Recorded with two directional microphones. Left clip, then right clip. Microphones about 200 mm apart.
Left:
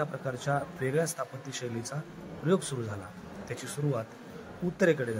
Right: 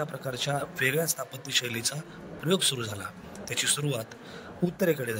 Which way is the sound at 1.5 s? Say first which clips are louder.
Right 9 dB; 40° right (ahead or behind).